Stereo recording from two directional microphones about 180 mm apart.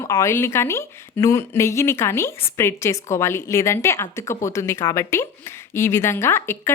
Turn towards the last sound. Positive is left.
turn(degrees=15)  # may be behind; listen again after turning